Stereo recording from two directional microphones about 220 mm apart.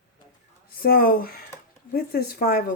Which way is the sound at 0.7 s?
45° left (ahead or behind).